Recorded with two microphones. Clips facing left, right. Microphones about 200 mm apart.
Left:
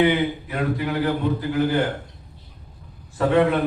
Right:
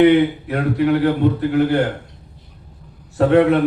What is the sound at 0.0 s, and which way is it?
A man's voice, 70° right (ahead or behind).